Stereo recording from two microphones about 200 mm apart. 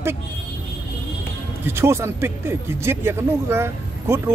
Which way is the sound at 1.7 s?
10° right (ahead or behind).